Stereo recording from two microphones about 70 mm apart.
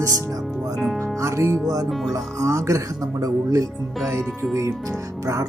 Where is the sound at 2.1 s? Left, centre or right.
Right.